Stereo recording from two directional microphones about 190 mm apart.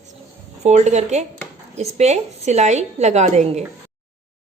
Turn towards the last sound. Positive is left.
turn(degrees=-35)  # may be behind; listen again after turning